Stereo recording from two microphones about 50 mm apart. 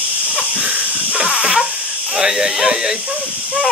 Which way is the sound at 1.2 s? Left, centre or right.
Centre.